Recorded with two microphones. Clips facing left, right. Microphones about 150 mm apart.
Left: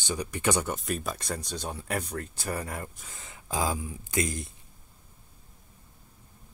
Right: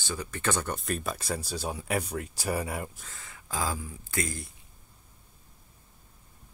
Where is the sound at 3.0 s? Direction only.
20° left (ahead or behind).